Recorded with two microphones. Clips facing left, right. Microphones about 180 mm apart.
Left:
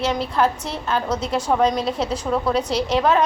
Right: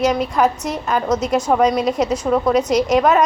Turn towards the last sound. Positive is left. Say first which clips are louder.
# right 4 dB
turn(degrees=-10)  # may be behind; listen again after turning